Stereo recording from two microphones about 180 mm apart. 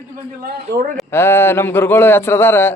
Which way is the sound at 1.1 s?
15° left (ahead or behind).